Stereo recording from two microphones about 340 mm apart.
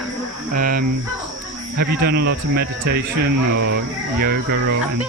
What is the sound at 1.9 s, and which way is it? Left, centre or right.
Speech, right.